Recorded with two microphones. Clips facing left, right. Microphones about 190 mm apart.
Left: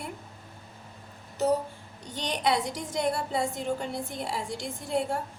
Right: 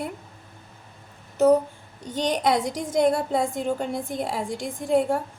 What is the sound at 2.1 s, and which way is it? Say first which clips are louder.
A woman's voice: right 5 dB; 45° right (ahead or behind).